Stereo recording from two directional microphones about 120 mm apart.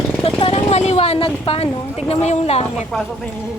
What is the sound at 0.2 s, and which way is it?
Vehicle, 50° left (ahead or behind).